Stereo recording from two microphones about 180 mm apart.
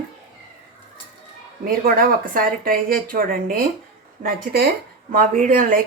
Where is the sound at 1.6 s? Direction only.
55° right (ahead or behind).